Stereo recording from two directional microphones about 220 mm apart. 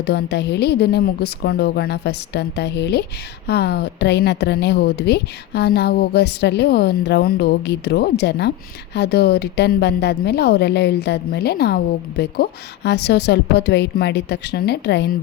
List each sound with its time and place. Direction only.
0.0 s a woman's voice: 50° left (ahead or behind)